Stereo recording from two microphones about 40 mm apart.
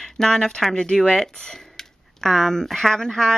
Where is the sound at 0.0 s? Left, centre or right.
Centre.